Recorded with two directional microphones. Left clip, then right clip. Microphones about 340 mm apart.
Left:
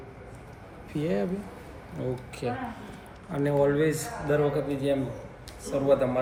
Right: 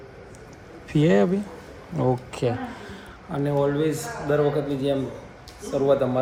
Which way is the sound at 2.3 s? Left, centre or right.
Right.